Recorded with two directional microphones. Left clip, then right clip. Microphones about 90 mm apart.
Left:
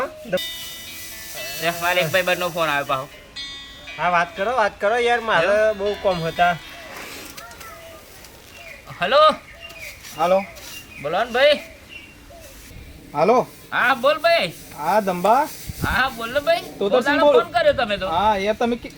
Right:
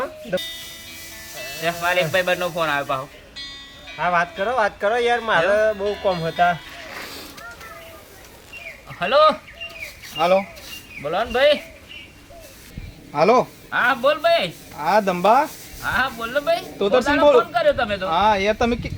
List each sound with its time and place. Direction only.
0.0 s speech: 5° left (ahead or behind)
8.9 s speech: 5° left (ahead or behind)
10.2 s speech: 40° right (ahead or behind)
10.7 s speech: centre (ahead or behind)
13.1 s speech: 35° right (ahead or behind)
13.7 s speech: 5° left (ahead or behind)
14.8 s speech: 40° right (ahead or behind)
15.8 s speech: centre (ahead or behind)
16.7 s speech: 35° right (ahead or behind)
17.0 s speech: centre (ahead or behind)
18.1 s speech: 35° right (ahead or behind)